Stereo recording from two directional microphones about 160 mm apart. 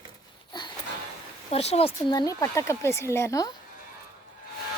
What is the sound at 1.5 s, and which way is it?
Speech, 40° left (ahead or behind).